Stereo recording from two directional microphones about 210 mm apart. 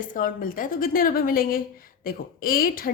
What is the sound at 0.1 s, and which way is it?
A woman's voice, 40° left (ahead or behind).